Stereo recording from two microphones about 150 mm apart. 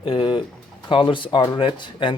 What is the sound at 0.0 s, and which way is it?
Speech, 35° left (ahead or behind).